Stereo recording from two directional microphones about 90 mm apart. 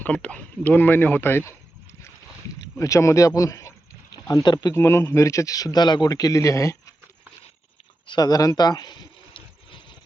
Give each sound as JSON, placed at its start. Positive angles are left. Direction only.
{"t": 0.0, "sound": "speech", "side_deg": 15}
{"t": 2.7, "sound": "speech", "side_deg": 35}
{"t": 4.4, "sound": "speech", "side_deg": 50}
{"t": 4.7, "sound": "speech", "side_deg": 30}
{"t": 8.0, "sound": "speech", "side_deg": 50}